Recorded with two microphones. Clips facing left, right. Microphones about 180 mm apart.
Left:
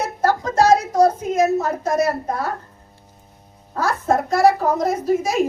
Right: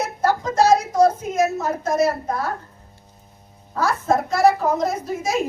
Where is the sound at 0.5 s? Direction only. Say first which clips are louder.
Left 1 dB; 35° left (ahead or behind).